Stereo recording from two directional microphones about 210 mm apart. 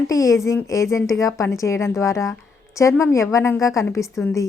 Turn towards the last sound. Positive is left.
turn(degrees=15)  # may be behind; listen again after turning